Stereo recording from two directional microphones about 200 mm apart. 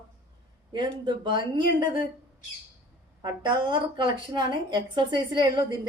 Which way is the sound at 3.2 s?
20° right (ahead or behind).